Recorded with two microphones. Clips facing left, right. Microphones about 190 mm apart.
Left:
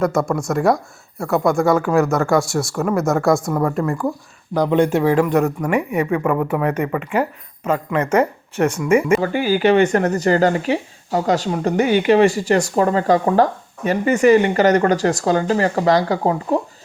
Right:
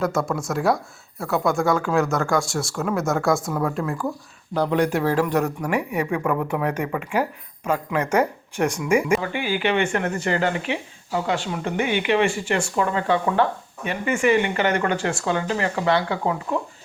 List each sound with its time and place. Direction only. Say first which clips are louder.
0.3 s speech: left 5 dB; centre (ahead or behind)
4.5 s a man's voice: left 5 dB; 15° left (ahead or behind)
5.1 s speech: left 5 dB; 5° left (ahead or behind)
8.5 s speech: left 5 dB; 5° left (ahead or behind)
9.2 s speech: left 8 dB; 40° left (ahead or behind)